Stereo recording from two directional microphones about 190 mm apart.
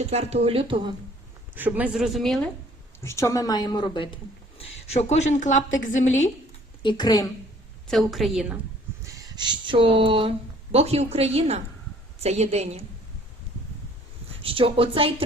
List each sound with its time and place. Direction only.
0.0 s speech: 35° right (ahead or behind)
1.5 s a woman's voice: 10° right (ahead or behind)
3.0 s a woman's voice: 15° left (ahead or behind); by 6.3 s 40° left (ahead or behind)
6.8 s speech: 20° left (ahead or behind)
7.9 s a woman's voice: centre (ahead or behind)
9.0 s speech: 15° right (ahead or behind); by 12.8 s 35° right (ahead or behind)
14.4 s a woman's voice: 30° right (ahead or behind)